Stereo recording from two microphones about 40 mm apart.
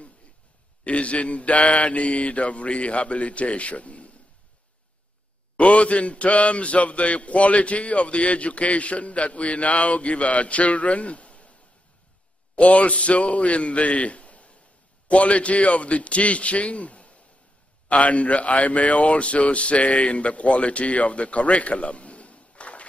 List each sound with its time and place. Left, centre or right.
0.8 s a man's voice: left
5.6 s a man's voice: left
12.5 s a man's voice: left